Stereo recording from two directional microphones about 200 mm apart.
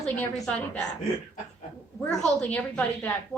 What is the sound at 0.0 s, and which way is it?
Speech, 5° left (ahead or behind).